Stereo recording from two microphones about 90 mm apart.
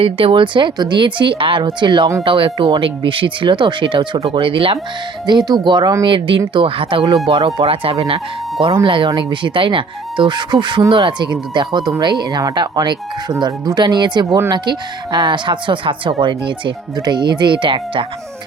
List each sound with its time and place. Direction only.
0.0 s speech: 90° right; by 2.0 s 60° right (ahead or behind)
2.2 s speech: 70° right (ahead or behind)
5.2 s speech: 55° right (ahead or behind)
6.0 s speech: 70° right (ahead or behind); by 8.2 s 90° right
8.8 s speech: 75° right (ahead or behind)
9.0 s speech: 60° right (ahead or behind)